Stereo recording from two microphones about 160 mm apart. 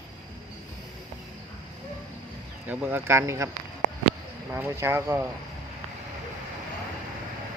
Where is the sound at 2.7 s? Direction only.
10° right (ahead or behind).